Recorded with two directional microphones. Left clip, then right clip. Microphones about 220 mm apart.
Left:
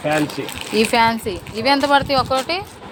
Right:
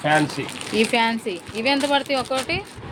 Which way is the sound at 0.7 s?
5° left (ahead or behind).